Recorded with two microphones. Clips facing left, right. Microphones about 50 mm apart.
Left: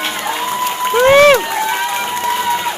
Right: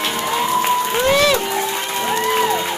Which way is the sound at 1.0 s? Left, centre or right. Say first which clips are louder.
Left 8 dB; left.